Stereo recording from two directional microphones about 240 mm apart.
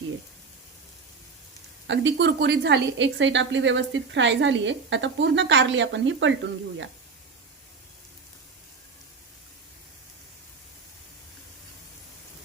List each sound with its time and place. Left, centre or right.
1.9 s a woman's voice: right